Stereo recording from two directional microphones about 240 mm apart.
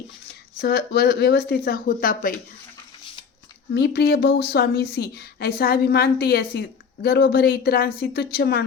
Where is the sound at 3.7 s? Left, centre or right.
Left.